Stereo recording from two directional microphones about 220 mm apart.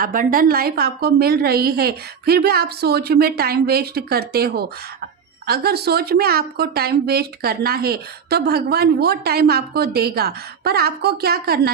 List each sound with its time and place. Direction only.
0.0 s a woman's voice: 40° right (ahead or behind)